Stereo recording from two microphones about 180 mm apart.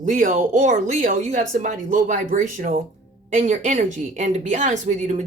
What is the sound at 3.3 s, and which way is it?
Speech, 45° right (ahead or behind).